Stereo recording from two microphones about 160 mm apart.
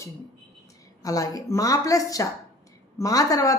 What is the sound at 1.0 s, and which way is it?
Speech, 20° left (ahead or behind).